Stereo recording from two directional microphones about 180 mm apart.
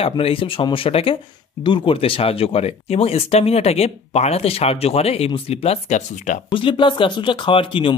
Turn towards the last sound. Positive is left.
turn(degrees=30)  # may be behind; listen again after turning